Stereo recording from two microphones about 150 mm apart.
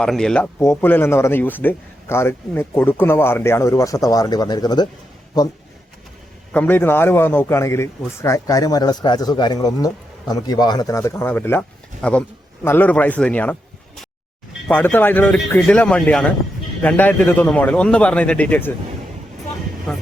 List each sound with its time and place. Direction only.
0.0 s speech: 5° left (ahead or behind)
0.6 s speech: 15° left (ahead or behind)
6.5 s a man's voice: 10° left (ahead or behind)